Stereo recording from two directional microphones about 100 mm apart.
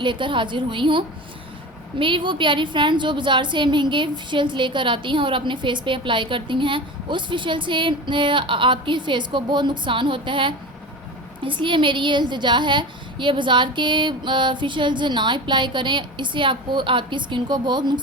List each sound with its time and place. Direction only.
0.0 s a woman's voice: 55° right (ahead or behind)